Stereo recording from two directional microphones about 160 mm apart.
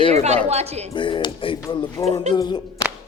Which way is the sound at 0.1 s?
45° right (ahead or behind).